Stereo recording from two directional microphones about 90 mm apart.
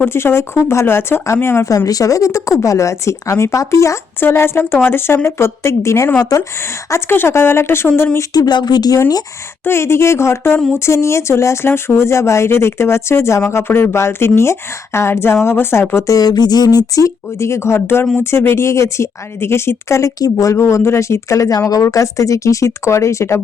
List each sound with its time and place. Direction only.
0.0 s speech: 25° left (ahead or behind)
1.7 s speech: 40° left (ahead or behind)
8.3 s speech: 50° left (ahead or behind)
9.6 s speech: 30° left (ahead or behind)
16.0 s speech: 45° left (ahead or behind)
16.9 s speech: 35° left (ahead or behind)